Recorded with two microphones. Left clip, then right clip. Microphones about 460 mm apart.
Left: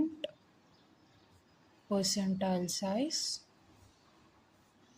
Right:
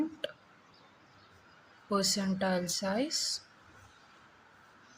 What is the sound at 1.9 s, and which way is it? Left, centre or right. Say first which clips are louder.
A woman's voice: right 3 dB; left.